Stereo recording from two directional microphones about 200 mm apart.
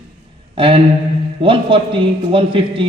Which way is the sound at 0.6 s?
25° right (ahead or behind).